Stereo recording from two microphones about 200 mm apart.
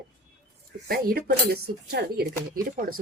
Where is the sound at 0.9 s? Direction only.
50° right (ahead or behind).